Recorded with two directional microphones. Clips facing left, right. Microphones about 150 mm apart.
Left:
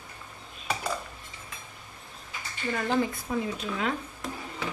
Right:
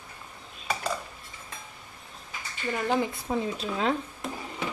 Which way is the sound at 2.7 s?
15° right (ahead or behind).